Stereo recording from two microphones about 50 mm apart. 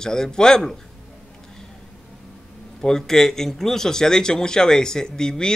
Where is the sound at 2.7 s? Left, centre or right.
Centre.